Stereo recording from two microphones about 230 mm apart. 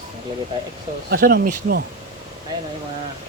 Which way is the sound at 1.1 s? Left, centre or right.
Right.